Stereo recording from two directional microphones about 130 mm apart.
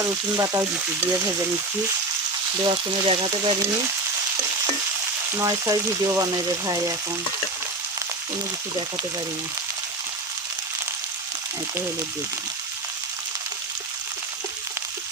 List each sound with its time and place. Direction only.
0.0 s frying: 25° right (ahead or behind)
2.6 s speech: 35° right (ahead or behind)
5.4 s frying: 25° right (ahead or behind)